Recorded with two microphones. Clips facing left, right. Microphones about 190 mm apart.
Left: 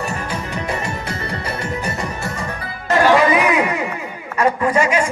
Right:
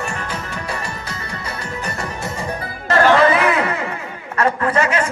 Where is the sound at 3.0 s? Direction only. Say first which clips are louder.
Even; 15° left (ahead or behind).